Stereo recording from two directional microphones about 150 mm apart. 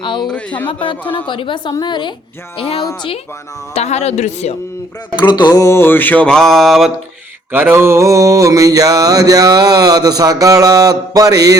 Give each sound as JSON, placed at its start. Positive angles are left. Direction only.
{"t": 0.0, "sound": "a woman's voice", "side_deg": 35}
{"t": 0.3, "sound": "mantra", "side_deg": 10}
{"t": 0.7, "sound": "a woman's voice", "side_deg": 35}
{"t": 2.6, "sound": "a woman's voice", "side_deg": 40}
{"t": 5.4, "sound": "mantra", "side_deg": 20}
{"t": 7.5, "sound": "mantra", "side_deg": -15}